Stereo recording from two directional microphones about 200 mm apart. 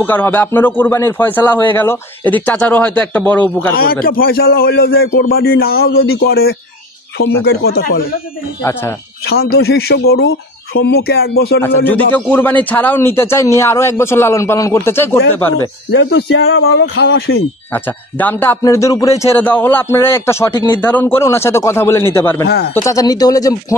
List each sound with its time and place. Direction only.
0.0 s a man's voice: 10° left (ahead or behind)
3.7 s a man's voice: 50° left (ahead or behind)
9.3 s a man's voice: 55° left (ahead or behind)
11.6 s a man's voice: 10° left (ahead or behind)
15.5 s speech: 70° left (ahead or behind)
16.4 s speech: 75° left (ahead or behind)
17.7 s a man's voice: 10° left (ahead or behind)